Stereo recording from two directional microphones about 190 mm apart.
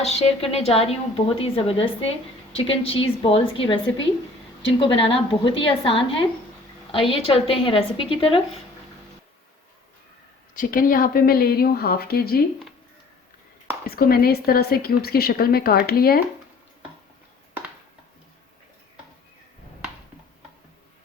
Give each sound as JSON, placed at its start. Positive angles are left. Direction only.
{"t": 0.0, "sound": "a woman's voice", "side_deg": 35}
{"t": 4.6, "sound": "a woman's voice", "side_deg": 30}
{"t": 10.5, "sound": "a woman's voice", "side_deg": 45}
{"t": 13.8, "sound": "a woman's voice", "side_deg": 50}